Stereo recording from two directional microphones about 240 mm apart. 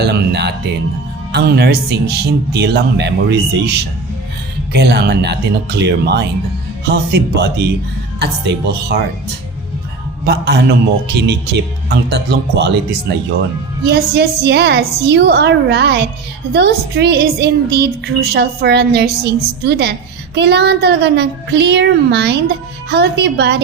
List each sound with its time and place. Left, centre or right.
0.0 s a woman's voice: right
10.2 s a woman's voice: right